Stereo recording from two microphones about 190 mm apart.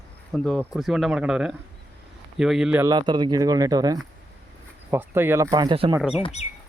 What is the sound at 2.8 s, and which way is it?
Speech, 20° right (ahead or behind).